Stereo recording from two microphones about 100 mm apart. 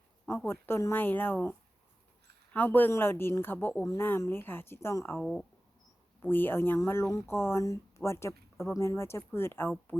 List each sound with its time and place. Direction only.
0.3 s speech: 25° left (ahead or behind)
5.2 s speech: 5° left (ahead or behind)
6.2 s speech: 20° left (ahead or behind)